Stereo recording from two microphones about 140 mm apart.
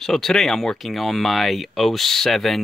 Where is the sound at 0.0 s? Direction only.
Centre (ahead or behind).